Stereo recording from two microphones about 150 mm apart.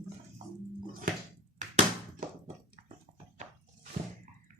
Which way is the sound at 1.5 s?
55° right (ahead or behind).